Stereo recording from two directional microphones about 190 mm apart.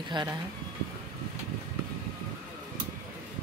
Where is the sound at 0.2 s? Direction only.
25° right (ahead or behind).